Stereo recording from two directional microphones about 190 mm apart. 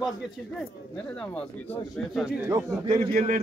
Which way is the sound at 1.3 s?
5° left (ahead or behind).